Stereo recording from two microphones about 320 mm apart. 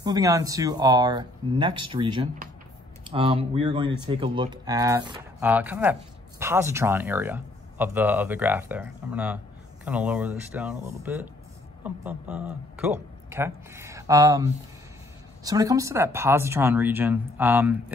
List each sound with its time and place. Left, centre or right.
0.0 s speech: centre